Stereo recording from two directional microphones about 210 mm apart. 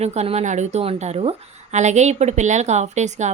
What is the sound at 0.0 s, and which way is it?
A woman's voice, 30° right (ahead or behind).